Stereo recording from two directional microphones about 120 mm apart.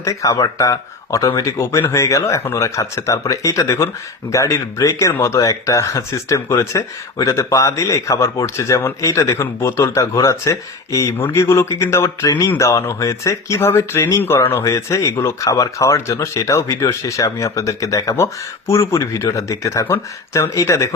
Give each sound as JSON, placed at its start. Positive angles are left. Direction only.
{"t": 0.0, "sound": "speech", "side_deg": 25}